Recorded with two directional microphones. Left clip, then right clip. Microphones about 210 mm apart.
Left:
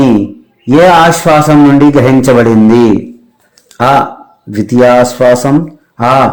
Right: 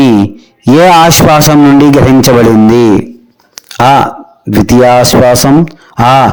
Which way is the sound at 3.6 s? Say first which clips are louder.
Right 3 dB; 40° right (ahead or behind).